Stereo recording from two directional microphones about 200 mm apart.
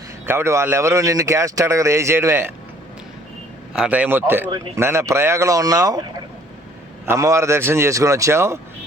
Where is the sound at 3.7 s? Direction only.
5° right (ahead or behind).